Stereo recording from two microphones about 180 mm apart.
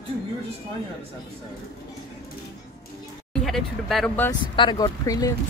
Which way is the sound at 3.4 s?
Centre (ahead or behind).